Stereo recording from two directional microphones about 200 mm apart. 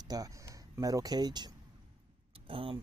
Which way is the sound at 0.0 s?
20° right (ahead or behind).